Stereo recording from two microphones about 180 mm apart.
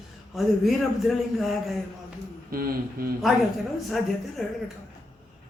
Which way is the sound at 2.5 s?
55° right (ahead or behind).